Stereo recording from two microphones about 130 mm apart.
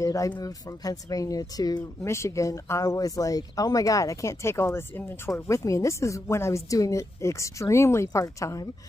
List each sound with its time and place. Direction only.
0.0 s speech: 25° left (ahead or behind)